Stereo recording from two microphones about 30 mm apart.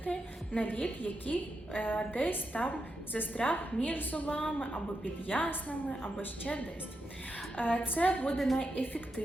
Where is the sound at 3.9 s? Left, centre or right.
Left.